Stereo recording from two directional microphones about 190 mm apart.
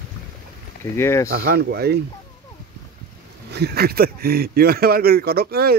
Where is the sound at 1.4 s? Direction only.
55° right (ahead or behind).